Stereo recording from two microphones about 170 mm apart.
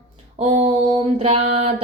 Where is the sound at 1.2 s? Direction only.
35° right (ahead or behind).